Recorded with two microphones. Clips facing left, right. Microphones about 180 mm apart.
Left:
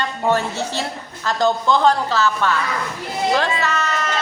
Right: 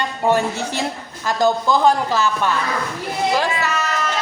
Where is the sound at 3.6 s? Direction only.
5° right (ahead or behind).